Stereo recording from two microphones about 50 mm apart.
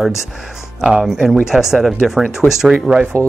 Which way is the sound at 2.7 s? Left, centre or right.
Centre.